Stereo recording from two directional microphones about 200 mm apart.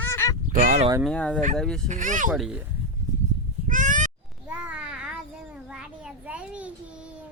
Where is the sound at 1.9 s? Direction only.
40° right (ahead or behind).